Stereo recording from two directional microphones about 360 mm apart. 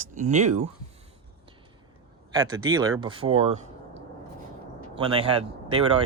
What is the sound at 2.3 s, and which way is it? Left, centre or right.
Speech, centre.